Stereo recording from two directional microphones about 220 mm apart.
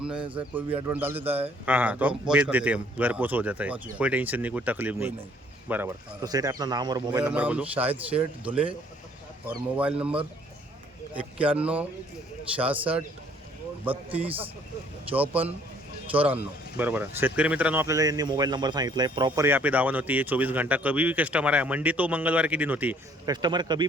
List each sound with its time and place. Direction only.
0.0 s speech: 5° right (ahead or behind)
7.2 s speech: 5° right (ahead or behind)
9.7 s speech: 5° right (ahead or behind)
11.5 s speech: 5° right (ahead or behind)
14.1 s speech: 25° right (ahead or behind)
15.1 s speech: 5° right (ahead or behind)
23.3 s speech: 20° right (ahead or behind)